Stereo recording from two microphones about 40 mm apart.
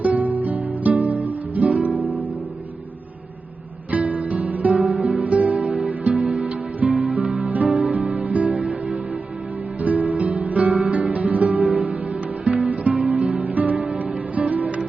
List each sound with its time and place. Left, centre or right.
0.0 s guitar: right
3.9 s music: right
9.8 s music: right